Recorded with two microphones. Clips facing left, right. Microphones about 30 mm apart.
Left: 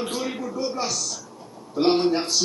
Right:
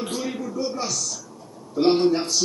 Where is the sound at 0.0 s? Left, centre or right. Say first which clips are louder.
Even; centre.